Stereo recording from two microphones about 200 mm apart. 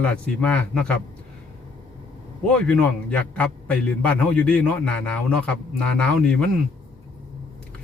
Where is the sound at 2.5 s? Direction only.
5° left (ahead or behind).